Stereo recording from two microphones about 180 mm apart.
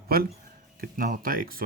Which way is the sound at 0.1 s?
55° right (ahead or behind).